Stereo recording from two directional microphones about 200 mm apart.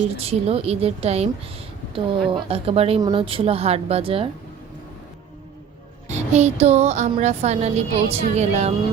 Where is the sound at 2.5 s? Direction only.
30° right (ahead or behind).